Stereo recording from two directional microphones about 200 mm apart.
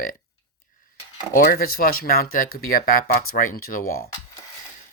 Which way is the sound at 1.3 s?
50° left (ahead or behind).